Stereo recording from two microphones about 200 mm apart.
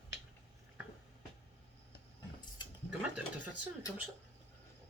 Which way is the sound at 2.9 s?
5° right (ahead or behind).